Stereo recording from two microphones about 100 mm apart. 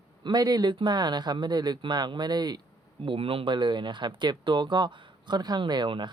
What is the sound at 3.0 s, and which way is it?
Speech, 65° right (ahead or behind).